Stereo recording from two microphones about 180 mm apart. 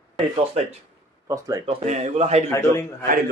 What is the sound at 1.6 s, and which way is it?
Speech, 40° right (ahead or behind).